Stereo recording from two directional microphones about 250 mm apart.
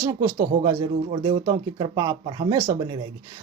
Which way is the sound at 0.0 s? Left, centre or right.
Centre.